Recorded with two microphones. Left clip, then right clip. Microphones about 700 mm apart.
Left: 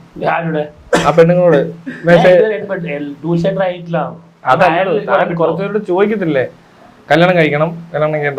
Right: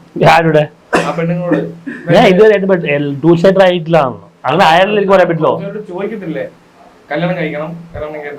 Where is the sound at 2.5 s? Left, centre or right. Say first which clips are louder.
Right 8 dB; right.